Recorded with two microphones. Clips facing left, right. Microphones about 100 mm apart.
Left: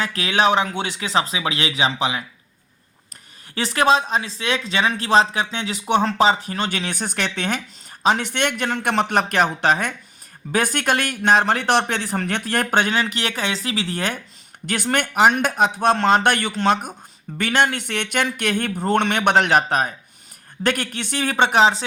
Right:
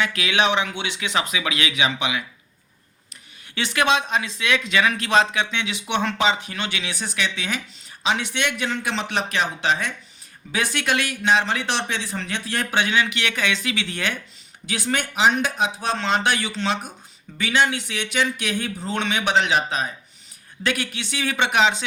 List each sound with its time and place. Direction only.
0.0 s speech: 35° left (ahead or behind)
3.5 s speech: 40° left (ahead or behind)
14.7 s speech: 55° left (ahead or behind); by 21.8 s 35° left (ahead or behind)